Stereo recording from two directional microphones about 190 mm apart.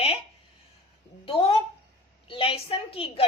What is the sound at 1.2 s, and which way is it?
A woman's voice, 30° left (ahead or behind).